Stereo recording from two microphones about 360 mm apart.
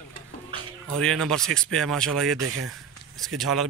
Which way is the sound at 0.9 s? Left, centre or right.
Centre.